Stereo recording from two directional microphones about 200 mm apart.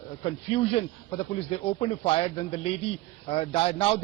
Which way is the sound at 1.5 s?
30° left (ahead or behind).